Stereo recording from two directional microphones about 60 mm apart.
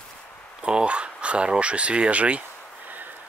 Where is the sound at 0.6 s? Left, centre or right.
Centre.